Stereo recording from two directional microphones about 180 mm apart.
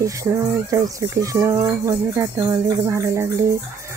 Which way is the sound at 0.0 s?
15° right (ahead or behind).